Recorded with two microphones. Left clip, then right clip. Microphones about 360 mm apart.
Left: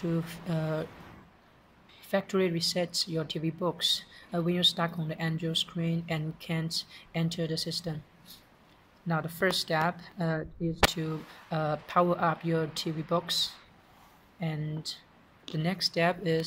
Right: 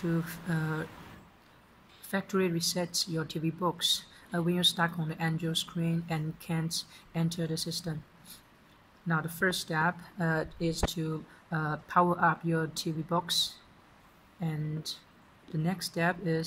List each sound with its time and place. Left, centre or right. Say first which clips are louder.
0.2 s speech: left 1 dB; centre
2.0 s speech: left 3 dB; centre
10.4 s speech: right 3 dB; right
10.9 s speech: left 1 dB; centre